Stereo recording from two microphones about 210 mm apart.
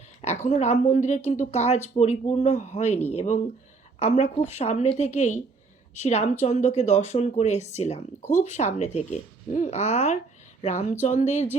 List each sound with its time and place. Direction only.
0.4 s speech: 30° left (ahead or behind)